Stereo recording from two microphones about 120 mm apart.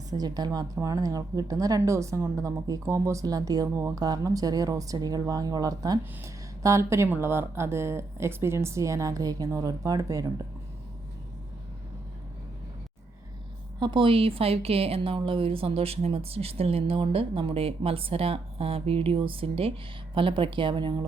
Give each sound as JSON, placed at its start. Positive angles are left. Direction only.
{"t": 0.1, "sound": "a woman's voice", "side_deg": -35}
{"t": 13.7, "sound": "a woman's voice", "side_deg": -40}